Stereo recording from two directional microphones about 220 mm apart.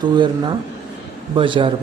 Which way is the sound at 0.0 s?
20° right (ahead or behind).